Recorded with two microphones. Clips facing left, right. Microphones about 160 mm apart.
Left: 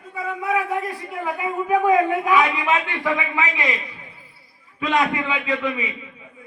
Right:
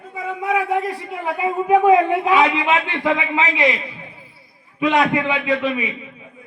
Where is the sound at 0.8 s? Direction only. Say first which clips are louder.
Right 2 dB; 25° right (ahead or behind).